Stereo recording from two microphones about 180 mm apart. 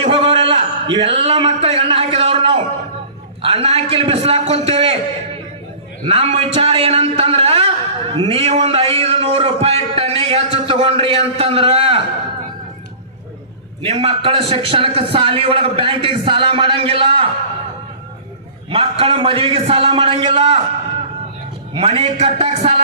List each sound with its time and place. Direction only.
0.0 s a sound: 35° right (ahead or behind)
3.4 s a man's voice: 35° right (ahead or behind)
6.1 s a man's voice: 35° right (ahead or behind)
13.8 s a man's voice: 30° right (ahead or behind)
18.7 s a man's voice: 30° right (ahead or behind)
21.7 s a man's voice: 30° right (ahead or behind)